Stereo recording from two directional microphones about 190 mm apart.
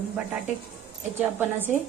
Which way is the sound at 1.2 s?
10° right (ahead or behind).